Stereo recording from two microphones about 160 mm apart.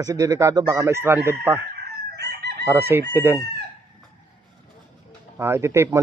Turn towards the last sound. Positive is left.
turn(degrees=-20)  # may be behind; listen again after turning